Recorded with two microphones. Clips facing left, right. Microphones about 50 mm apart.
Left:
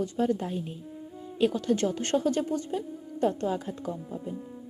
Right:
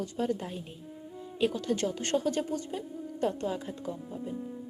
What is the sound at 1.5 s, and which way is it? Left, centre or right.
Speech, left.